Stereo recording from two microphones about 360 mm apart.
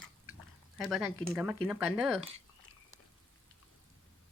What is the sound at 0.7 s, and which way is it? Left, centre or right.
Speech, centre.